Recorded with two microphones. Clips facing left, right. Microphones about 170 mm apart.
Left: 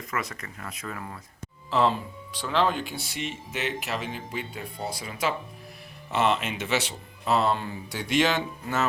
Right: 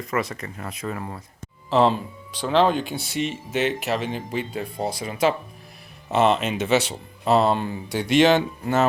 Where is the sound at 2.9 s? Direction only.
25° right (ahead or behind).